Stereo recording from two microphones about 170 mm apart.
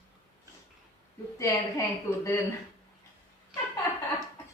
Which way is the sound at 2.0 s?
15° left (ahead or behind).